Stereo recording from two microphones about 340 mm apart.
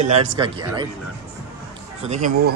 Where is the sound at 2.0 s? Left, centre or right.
Right.